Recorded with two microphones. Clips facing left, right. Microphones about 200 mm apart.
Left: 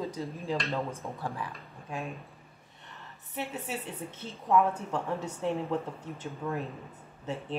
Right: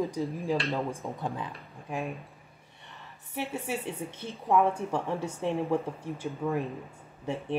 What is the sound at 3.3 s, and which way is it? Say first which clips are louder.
A woman's voice: right 3 dB; 10° right (ahead or behind).